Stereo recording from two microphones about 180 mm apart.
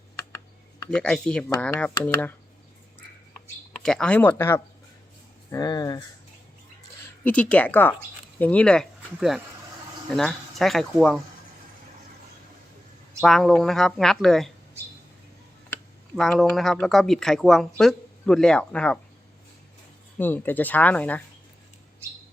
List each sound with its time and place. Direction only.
0.2 s computer keyboard: 20° left (ahead or behind)
0.9 s speech: 5° left (ahead or behind)
3.8 s speech: 5° left (ahead or behind); by 6.1 s 20° left (ahead or behind)
7.3 s speech: 5° left (ahead or behind)
13.2 s speech: 5° left (ahead or behind)
15.7 s speech: centre (ahead or behind)
20.1 s speech: 10° left (ahead or behind)